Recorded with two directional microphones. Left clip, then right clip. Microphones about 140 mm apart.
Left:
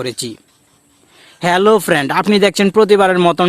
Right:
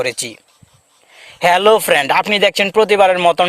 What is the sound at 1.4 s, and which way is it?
Speech, 25° right (ahead or behind).